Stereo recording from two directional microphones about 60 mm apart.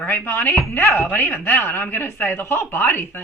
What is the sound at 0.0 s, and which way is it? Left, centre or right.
Speech, left.